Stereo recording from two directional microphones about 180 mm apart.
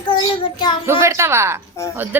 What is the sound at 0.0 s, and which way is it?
Child singing, 25° left (ahead or behind).